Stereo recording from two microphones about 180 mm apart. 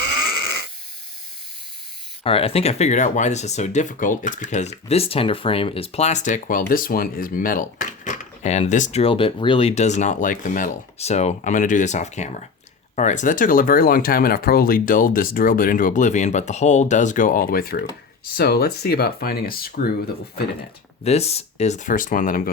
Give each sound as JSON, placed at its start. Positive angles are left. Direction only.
{"t": 2.2, "sound": "speech", "side_deg": 30}
{"t": 21.0, "sound": "speech", "side_deg": 35}